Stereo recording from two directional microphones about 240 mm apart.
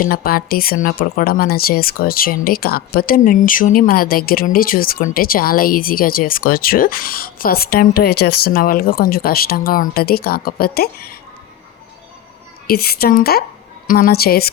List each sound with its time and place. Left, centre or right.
0.0 s speech: left
12.6 s speech: left